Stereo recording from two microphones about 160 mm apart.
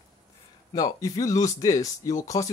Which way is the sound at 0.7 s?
20° left (ahead or behind).